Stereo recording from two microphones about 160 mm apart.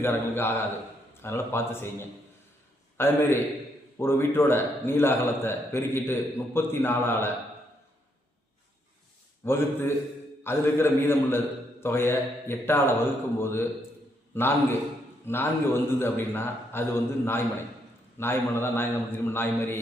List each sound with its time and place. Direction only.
0.0 s a man's voice: 15° left (ahead or behind)
9.4 s a man's voice: 15° left (ahead or behind)